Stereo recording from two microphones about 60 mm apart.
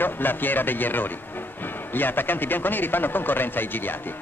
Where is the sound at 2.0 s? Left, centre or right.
Left.